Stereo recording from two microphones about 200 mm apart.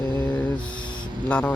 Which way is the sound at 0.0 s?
20° left (ahead or behind).